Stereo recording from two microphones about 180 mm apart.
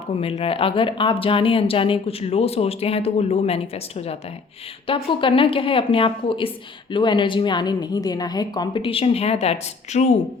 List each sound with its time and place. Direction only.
0.2 s a woman's voice: 35° left (ahead or behind)